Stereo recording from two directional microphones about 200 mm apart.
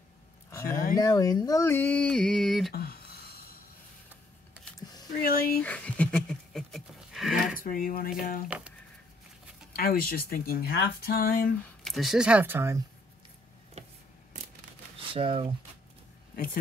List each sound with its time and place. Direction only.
0.7 s a sound: 45° left (ahead or behind)
0.9 s speech: 20° left (ahead or behind); by 2.7 s centre (ahead or behind)
2.7 s a sound: 50° left (ahead or behind)
5.2 s speech: 45° left (ahead or behind)
5.6 s a sound: 5° left (ahead or behind)
7.6 s speech: 45° left (ahead or behind)
8.5 s speech: 5° right (ahead or behind)
9.7 s speech: 50° left (ahead or behind)
11.8 s speech: centre (ahead or behind)
15.0 s speech: 25° right (ahead or behind)